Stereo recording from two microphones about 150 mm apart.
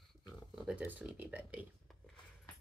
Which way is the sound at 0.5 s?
5° right (ahead or behind).